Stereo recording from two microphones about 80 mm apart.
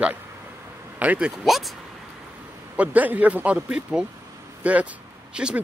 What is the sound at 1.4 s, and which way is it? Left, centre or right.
Speech, centre.